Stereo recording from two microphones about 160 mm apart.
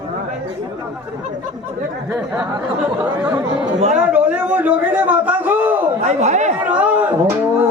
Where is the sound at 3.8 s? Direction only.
45° right (ahead or behind).